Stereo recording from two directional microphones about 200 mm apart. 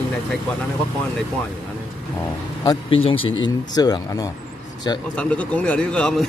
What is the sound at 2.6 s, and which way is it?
Speech, 25° left (ahead or behind).